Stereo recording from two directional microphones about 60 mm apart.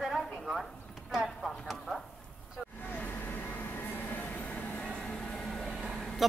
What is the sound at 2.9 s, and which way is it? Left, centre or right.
Vehicle, left.